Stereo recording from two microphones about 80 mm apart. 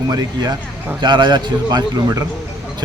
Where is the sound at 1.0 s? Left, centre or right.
Right.